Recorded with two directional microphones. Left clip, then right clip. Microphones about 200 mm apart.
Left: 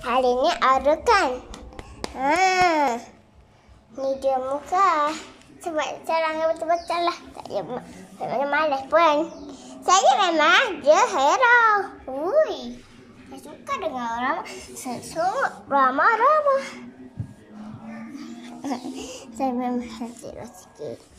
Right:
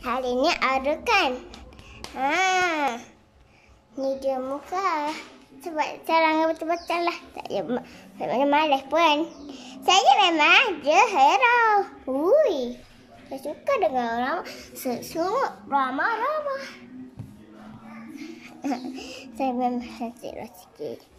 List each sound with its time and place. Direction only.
0.0 s a child's voice: centre (ahead or behind); by 15.4 s 15° right (ahead or behind)
15.4 s speech: 5° left (ahead or behind)
18.2 s a child's voice: centre (ahead or behind)